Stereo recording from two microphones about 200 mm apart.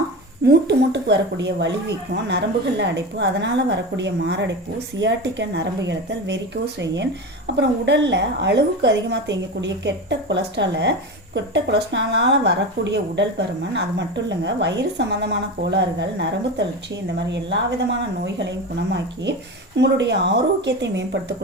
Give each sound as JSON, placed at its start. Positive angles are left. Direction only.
{"t": 0.4, "sound": "speech", "side_deg": -60}
{"t": 14.3, "sound": "speech", "side_deg": -60}